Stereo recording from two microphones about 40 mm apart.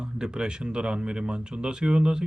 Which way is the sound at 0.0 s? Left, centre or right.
Right.